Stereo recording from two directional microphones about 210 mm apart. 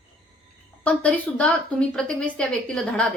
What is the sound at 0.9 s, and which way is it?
Speech, 5° left (ahead or behind).